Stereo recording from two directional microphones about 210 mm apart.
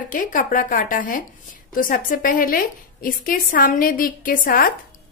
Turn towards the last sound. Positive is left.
turn(degrees=40)  # may be behind; listen again after turning